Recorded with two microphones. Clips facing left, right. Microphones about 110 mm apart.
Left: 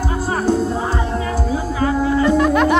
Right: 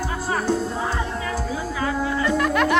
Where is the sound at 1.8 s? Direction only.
30° left (ahead or behind).